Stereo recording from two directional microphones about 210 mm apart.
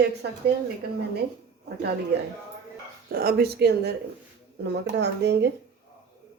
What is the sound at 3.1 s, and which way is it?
Speech, 45° right (ahead or behind).